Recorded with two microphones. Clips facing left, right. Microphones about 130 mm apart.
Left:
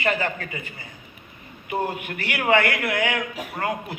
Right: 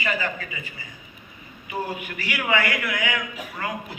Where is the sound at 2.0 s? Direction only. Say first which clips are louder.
Left 2 dB; 55° left (ahead or behind).